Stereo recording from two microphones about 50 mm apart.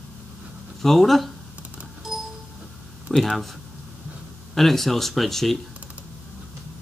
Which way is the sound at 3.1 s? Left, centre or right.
Centre.